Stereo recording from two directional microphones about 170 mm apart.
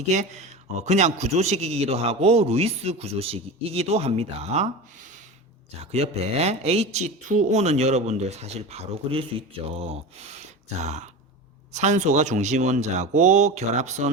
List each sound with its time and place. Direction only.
0.1 s a man's voice: 45° right (ahead or behind)